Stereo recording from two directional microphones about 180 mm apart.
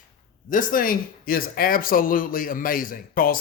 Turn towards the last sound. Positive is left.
turn(degrees=55)  # may be behind; listen again after turning